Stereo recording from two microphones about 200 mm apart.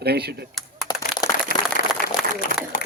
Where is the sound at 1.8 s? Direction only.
35° left (ahead or behind).